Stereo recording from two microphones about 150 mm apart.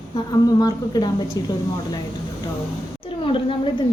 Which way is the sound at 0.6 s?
25° left (ahead or behind).